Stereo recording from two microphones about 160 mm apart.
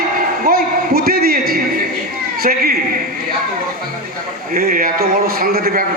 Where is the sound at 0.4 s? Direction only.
70° right (ahead or behind).